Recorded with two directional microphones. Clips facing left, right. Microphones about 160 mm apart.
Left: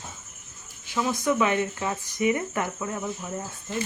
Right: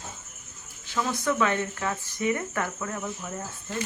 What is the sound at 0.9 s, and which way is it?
Speech, 10° left (ahead or behind).